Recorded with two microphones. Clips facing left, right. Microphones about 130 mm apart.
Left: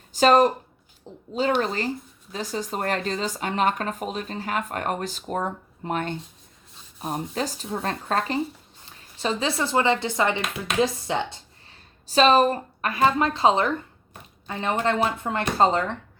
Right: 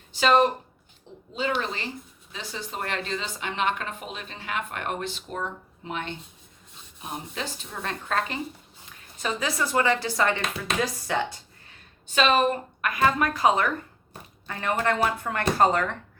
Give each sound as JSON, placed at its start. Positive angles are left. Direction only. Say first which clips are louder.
{"t": 0.1, "sound": "speech", "louder": "left 3 dB", "side_deg": 40}
{"t": 12.0, "sound": "speech", "louder": "left 4 dB", "side_deg": 35}